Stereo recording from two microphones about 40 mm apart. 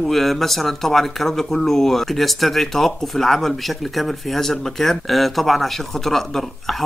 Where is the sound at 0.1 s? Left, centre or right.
Centre.